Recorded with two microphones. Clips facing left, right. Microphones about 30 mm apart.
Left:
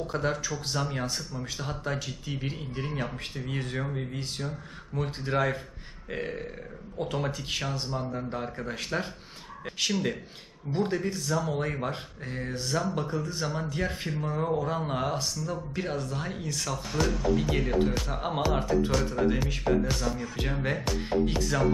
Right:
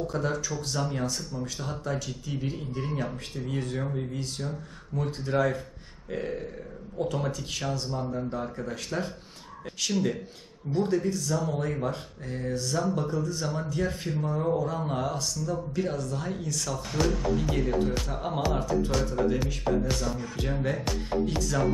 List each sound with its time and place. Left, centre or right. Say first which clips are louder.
0.1 s speech: even; left
10.7 s speech: right 2 dB; left
19.9 s music: even; centre
20.4 s speech: right 1 dB; left